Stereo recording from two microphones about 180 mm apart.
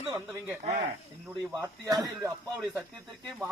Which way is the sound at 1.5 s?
20° right (ahead or behind).